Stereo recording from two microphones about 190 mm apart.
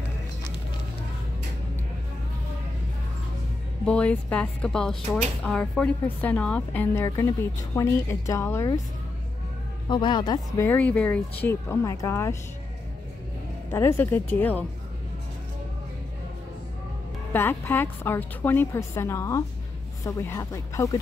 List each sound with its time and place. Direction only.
3.8 s speech: 5° left (ahead or behind)
9.8 s speech: 25° left (ahead or behind)
10.7 s speech: 10° left (ahead or behind)
13.7 s speech: 10° left (ahead or behind)
17.3 s speech: 10° left (ahead or behind)